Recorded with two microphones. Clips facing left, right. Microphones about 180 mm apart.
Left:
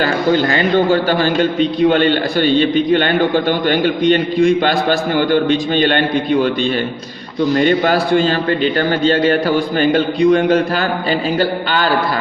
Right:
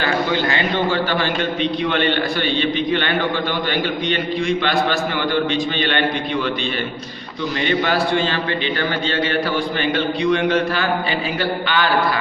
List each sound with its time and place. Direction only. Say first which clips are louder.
0.0 s a man's voice: left 5 dB; 40° left (ahead or behind)
7.5 s a man's voice: left 6 dB; 45° left (ahead or behind)